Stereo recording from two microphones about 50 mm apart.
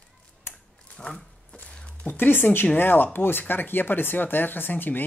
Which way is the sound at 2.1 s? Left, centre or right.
Left.